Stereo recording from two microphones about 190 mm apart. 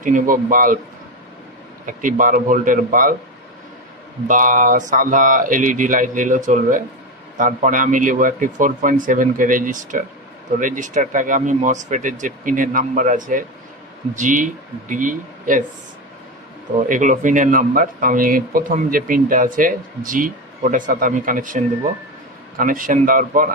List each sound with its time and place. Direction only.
0.0 s speech: 45° right (ahead or behind)
1.9 s speech: 45° right (ahead or behind)
4.3 s speech: 45° right (ahead or behind)
16.9 s speech: 40° right (ahead or behind)
22.6 s speech: 45° right (ahead or behind)